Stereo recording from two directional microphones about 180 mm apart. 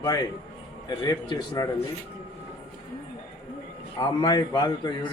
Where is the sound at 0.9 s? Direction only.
25° left (ahead or behind).